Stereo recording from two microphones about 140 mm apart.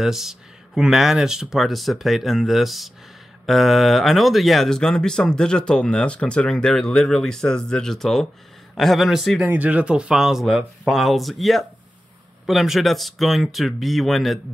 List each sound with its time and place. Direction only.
0.0 s speech: centre (ahead or behind)
9.4 s speech: 10° right (ahead or behind)